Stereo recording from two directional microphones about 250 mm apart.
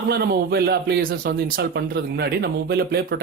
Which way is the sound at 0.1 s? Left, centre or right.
Right.